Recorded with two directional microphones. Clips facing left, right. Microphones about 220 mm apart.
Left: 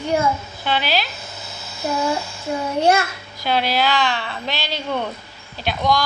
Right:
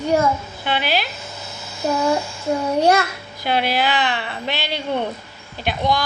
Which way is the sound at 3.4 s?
55° right (ahead or behind).